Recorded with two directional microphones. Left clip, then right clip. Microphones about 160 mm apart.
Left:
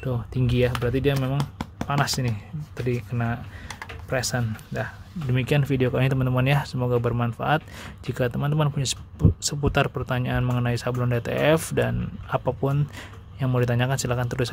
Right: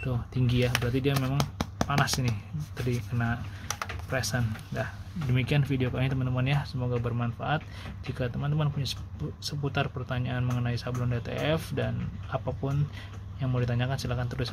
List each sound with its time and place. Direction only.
0.0 s speech: 35° left (ahead or behind)
1.4 s a sound: 20° right (ahead or behind)
1.9 s speech: 35° left (ahead or behind)